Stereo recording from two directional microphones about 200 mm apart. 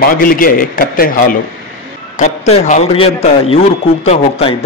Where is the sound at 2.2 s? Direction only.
35° left (ahead or behind).